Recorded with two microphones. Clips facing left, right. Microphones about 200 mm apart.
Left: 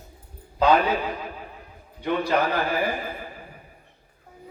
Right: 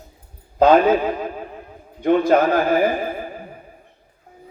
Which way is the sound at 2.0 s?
45° right (ahead or behind).